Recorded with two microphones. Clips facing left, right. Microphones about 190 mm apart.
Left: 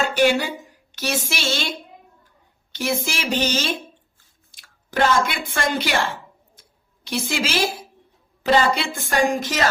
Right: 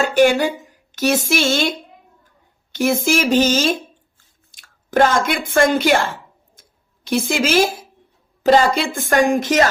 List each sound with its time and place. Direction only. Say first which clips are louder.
0.2 s speech: right 6 dB; 50° right (ahead or behind)
2.7 s speech: right 8 dB; 50° right (ahead or behind)
4.9 s speech: right 4 dB; 45° right (ahead or behind)
6.6 s a sound: right 1 dB; 50° right (ahead or behind)
8.4 s speech: right 5 dB; 45° right (ahead or behind)